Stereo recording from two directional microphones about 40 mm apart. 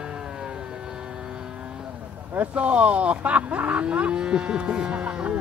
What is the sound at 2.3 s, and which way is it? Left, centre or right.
Speech, right.